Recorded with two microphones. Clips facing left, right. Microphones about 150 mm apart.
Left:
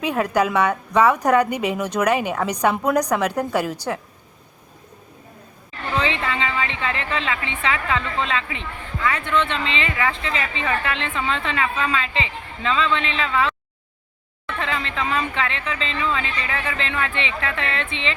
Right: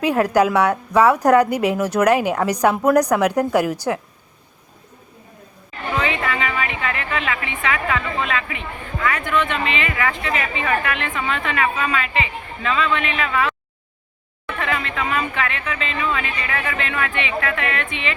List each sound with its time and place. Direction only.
0.0 s speech: 10° right (ahead or behind)
6.0 s a woman's voice: 25° left (ahead or behind)
14.6 s a woman's voice: 25° left (ahead or behind)